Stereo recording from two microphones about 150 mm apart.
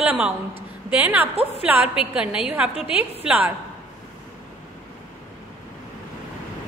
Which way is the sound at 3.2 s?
10° right (ahead or behind).